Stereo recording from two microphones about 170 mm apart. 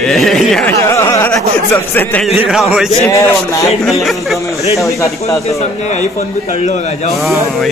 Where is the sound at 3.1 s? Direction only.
15° left (ahead or behind).